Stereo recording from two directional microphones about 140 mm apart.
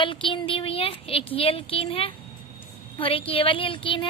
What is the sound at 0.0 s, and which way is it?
A woman's voice, 35° left (ahead or behind).